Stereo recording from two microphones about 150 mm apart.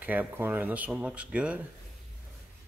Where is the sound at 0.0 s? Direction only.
10° right (ahead or behind).